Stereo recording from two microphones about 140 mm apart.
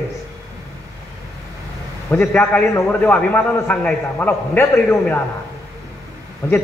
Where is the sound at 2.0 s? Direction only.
15° left (ahead or behind).